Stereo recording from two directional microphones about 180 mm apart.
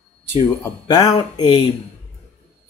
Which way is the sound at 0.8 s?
25° left (ahead or behind).